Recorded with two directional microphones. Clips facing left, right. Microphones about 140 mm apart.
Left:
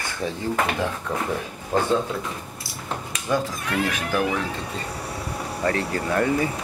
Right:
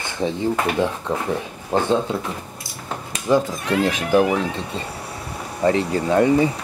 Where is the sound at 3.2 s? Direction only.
25° right (ahead or behind).